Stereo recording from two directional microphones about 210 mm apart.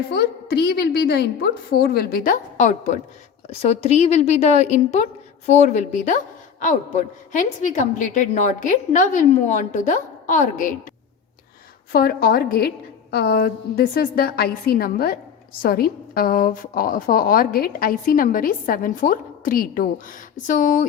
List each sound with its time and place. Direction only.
0.1 s a woman's voice: 50° left (ahead or behind)
11.9 s a woman's voice: 45° left (ahead or behind)